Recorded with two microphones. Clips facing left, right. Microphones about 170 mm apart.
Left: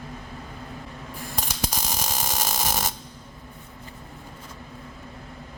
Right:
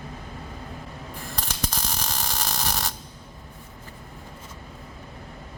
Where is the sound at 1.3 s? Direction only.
15° left (ahead or behind).